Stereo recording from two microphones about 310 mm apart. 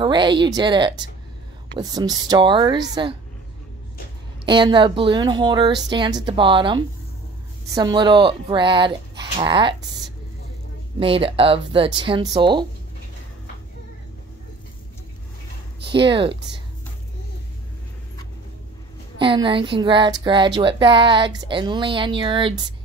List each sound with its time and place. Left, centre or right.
0.0 s speech: centre
4.5 s speech: centre
15.8 s speech: centre
19.1 s speech: centre